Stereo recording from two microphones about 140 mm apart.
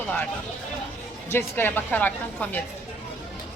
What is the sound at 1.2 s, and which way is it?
Speech, 15° left (ahead or behind).